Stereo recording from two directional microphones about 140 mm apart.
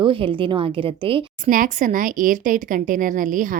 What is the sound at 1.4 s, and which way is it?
A woman's voice, 75° right (ahead or behind).